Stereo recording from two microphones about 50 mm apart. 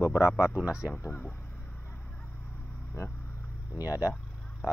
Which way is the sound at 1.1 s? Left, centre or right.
Left.